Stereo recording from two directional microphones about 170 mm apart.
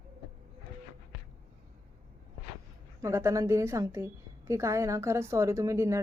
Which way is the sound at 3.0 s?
15° right (ahead or behind).